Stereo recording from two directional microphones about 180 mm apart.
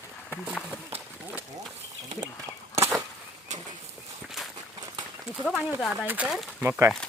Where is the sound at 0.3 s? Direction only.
10° left (ahead or behind).